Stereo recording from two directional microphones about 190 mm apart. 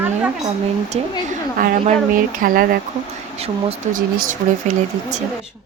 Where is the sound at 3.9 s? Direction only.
45° right (ahead or behind).